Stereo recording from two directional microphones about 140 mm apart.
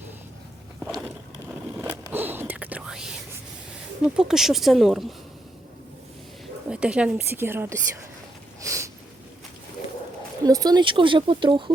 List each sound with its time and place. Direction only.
2.0 s whispering: 15° right (ahead or behind)
4.0 s speech: 5° right (ahead or behind)
6.7 s a woman's voice: 5° right (ahead or behind)
8.6 s snort: 20° right (ahead or behind)
10.4 s speech: 25° right (ahead or behind)